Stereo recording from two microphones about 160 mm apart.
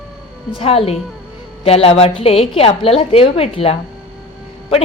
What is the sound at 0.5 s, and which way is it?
A woman's voice, 35° left (ahead or behind).